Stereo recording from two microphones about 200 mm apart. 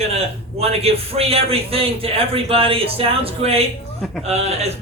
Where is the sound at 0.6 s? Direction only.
30° right (ahead or behind).